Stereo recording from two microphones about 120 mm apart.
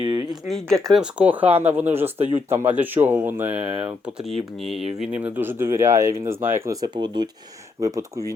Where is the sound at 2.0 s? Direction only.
60° right (ahead or behind).